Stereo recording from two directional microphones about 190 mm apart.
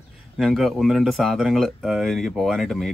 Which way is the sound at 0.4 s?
Centre (ahead or behind).